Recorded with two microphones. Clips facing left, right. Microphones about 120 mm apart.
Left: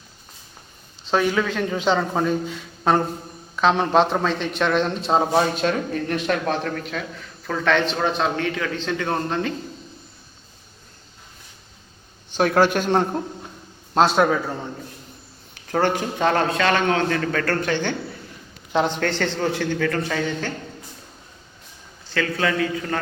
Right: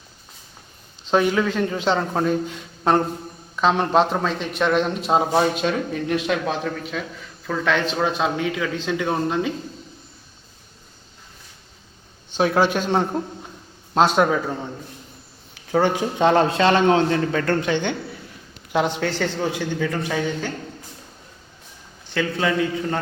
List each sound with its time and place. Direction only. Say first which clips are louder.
1.1 s speech: right 2 dB; 5° right (ahead or behind)
12.4 s speech: left 1 dB; 5° right (ahead or behind)
15.5 s a man's voice: right 1 dB; 5° right (ahead or behind)
18.7 s a man's voice: even; 5° right (ahead or behind)
22.1 s a man's voice: right 1 dB; 20° right (ahead or behind)